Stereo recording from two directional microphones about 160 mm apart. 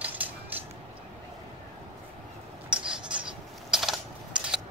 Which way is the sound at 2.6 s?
5° right (ahead or behind).